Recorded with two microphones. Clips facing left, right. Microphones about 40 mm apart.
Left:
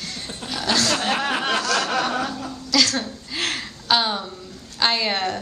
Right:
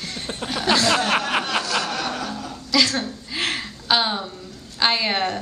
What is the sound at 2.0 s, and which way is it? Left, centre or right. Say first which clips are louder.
Chuckle: left 4 dB; left.